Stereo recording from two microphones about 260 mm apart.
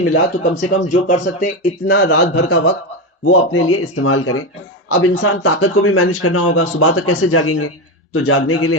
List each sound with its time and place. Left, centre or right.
0.0 s a man's voice: left
0.8 s speech: left
1.9 s speech: left